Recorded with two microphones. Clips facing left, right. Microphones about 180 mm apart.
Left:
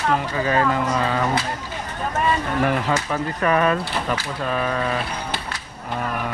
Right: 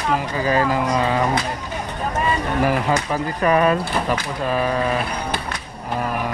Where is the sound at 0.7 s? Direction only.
10° right (ahead or behind).